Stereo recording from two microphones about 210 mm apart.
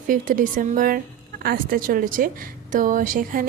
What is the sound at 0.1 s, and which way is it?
A woman's voice, 40° right (ahead or behind).